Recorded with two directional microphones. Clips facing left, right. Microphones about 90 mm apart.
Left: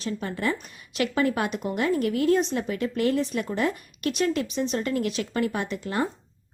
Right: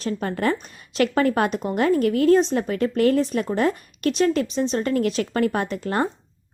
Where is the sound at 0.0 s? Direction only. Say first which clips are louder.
Right 5 dB; 50° right (ahead or behind).